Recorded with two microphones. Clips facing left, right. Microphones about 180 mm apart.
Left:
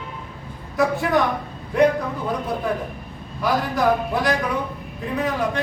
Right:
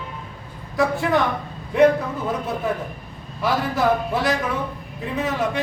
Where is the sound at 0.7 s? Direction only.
Centre (ahead or behind).